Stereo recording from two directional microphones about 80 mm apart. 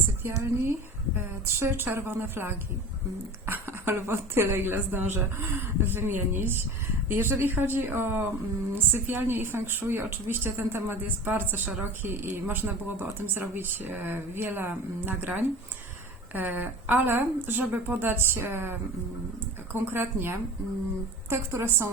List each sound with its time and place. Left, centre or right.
0.2 s a woman's voice: right